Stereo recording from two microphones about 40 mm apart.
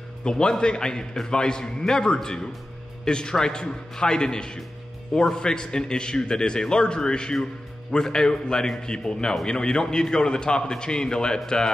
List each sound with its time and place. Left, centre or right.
0.2 s a man's voice: left